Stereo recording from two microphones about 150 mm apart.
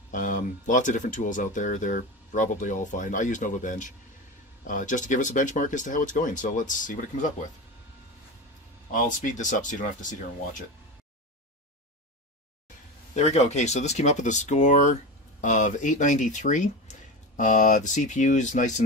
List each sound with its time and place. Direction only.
0.1 s speech: 60° left (ahead or behind)
8.9 s speech: 60° left (ahead or behind)
13.1 s speech: 50° left (ahead or behind)